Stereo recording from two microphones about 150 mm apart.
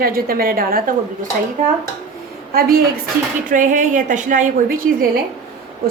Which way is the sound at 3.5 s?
60° right (ahead or behind).